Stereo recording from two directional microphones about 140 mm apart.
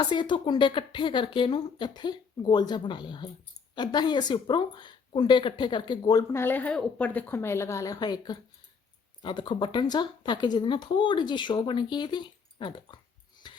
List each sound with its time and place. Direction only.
0.0 s speech: 35° left (ahead or behind)